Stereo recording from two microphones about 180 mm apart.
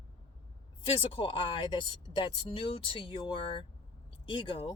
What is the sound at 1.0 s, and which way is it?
Speech, 30° left (ahead or behind).